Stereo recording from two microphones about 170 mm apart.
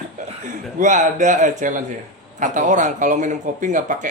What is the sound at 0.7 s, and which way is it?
Speech, 45° right (ahead or behind).